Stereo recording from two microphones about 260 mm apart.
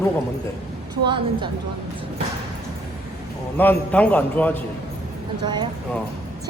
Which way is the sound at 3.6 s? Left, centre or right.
Centre.